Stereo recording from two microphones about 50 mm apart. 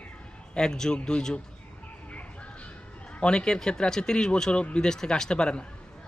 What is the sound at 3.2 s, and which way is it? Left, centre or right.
A man's voice, centre.